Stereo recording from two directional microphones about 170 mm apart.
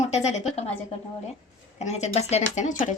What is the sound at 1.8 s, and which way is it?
Speech, 40° left (ahead or behind).